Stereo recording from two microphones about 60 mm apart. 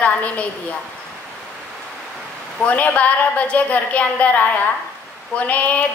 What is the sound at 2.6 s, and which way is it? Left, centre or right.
A woman's voice, left.